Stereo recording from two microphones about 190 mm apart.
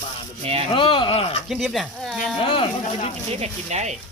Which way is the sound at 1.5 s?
Centre (ahead or behind).